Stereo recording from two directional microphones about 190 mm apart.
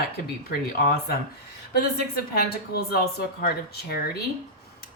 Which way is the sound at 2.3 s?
55° left (ahead or behind).